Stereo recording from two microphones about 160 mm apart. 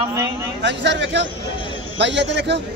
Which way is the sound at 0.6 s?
90° right.